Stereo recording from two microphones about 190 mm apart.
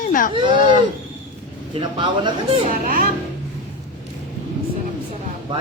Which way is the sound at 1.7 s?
25° right (ahead or behind).